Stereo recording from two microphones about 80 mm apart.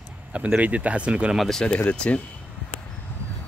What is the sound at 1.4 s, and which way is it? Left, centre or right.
Speech, centre.